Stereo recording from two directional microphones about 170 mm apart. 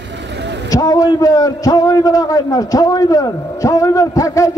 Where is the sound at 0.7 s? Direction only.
20° left (ahead or behind).